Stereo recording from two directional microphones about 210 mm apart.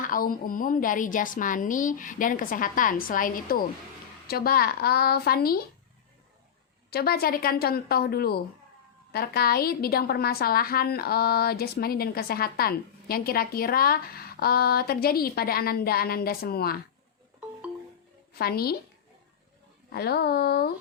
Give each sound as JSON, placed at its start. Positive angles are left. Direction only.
{"t": 0.0, "sound": "a woman's voice", "side_deg": 40}
{"t": 6.9, "sound": "a woman's voice", "side_deg": 45}
{"t": 18.3, "sound": "a woman's voice", "side_deg": 45}
{"t": 19.9, "sound": "a woman's voice", "side_deg": 50}